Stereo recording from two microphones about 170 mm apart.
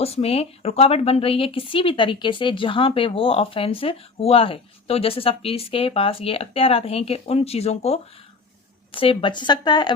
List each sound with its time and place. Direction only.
0.0 s a woman's voice: 35° left (ahead or behind)